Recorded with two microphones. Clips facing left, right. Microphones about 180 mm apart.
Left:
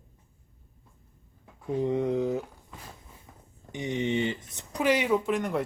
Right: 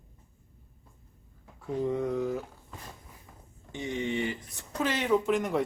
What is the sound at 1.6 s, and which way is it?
Speech, 20° left (ahead or behind).